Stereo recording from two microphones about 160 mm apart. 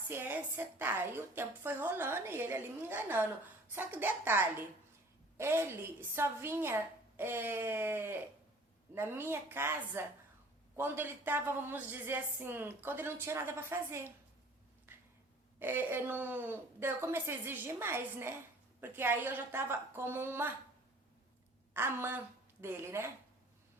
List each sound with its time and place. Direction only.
0.1 s a woman's voice: 15° right (ahead or behind)
14.9 s a sound: 15° right (ahead or behind)
15.5 s a woman's voice: 15° right (ahead or behind)
21.7 s a woman's voice: 15° right (ahead or behind)